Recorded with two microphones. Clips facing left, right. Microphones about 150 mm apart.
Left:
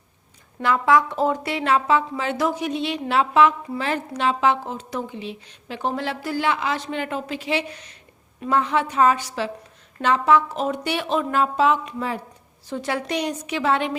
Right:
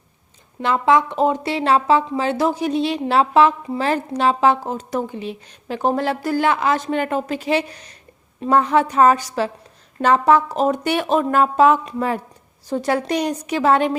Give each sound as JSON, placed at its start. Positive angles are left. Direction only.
{"t": 0.6, "sound": "a woman's voice", "side_deg": -25}
{"t": 12.6, "sound": "a woman's voice", "side_deg": -40}